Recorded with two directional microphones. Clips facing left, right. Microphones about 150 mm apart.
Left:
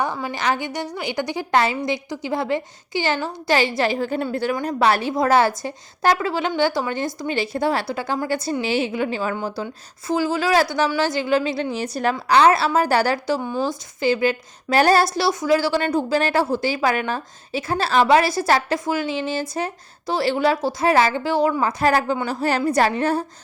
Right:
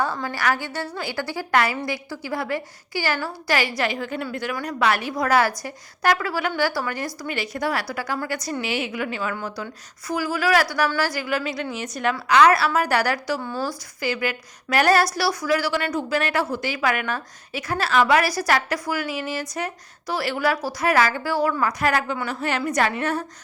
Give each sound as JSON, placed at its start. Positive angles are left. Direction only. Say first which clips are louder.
{"t": 0.0, "sound": "a woman's voice", "louder": "left 1 dB", "side_deg": 15}